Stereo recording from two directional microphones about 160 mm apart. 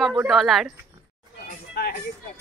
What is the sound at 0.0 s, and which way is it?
Speech, 5° right (ahead or behind).